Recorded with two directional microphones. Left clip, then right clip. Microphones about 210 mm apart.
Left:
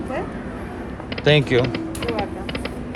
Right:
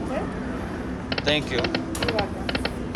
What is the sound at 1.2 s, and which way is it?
Speech, 30° left (ahead or behind).